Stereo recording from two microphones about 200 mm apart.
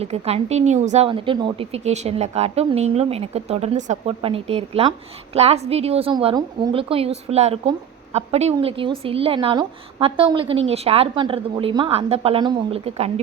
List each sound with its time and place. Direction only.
0.0 s a woman's voice: 30° right (ahead or behind)